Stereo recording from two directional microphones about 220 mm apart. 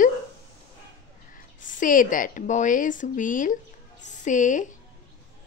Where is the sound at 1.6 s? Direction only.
35° left (ahead or behind).